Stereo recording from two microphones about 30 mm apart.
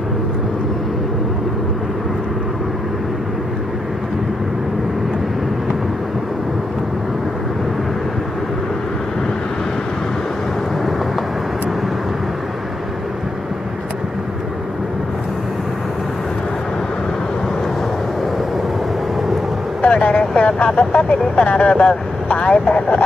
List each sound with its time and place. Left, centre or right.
19.8 s vehicle: left
21.5 s speech: left